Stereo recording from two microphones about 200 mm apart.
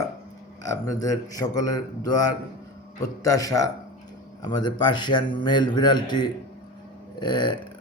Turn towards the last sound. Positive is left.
turn(degrees=20)  # may be behind; listen again after turning